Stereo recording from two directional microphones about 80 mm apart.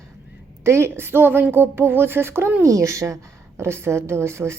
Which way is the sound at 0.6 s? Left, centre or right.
Right.